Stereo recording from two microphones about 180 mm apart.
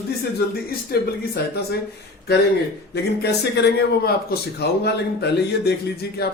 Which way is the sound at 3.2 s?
65° left (ahead or behind).